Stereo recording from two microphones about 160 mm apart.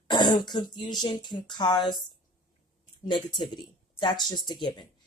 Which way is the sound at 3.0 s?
30° left (ahead or behind).